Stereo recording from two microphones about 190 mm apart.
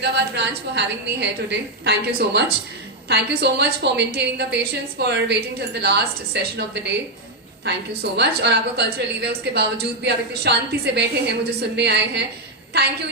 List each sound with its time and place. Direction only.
0.0 s a woman's voice: 65° right (ahead or behind)
8.1 s a woman's voice: 60° right (ahead or behind)